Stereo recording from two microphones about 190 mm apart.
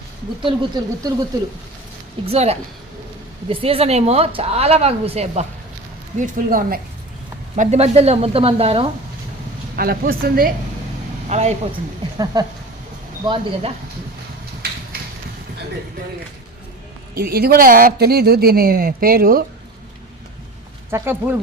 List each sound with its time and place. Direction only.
0.4 s speech: 20° right (ahead or behind)
2.3 s a woman's voice: 35° right (ahead or behind)
7.5 s a woman's voice: 35° right (ahead or behind)
9.7 s speech: 50° right (ahead or behind)
11.3 s a woman's voice: 35° right (ahead or behind)
12.1 s speech: 20° right (ahead or behind)
17.2 s speech: 55° right (ahead or behind)
20.9 s speech: 10° right (ahead or behind)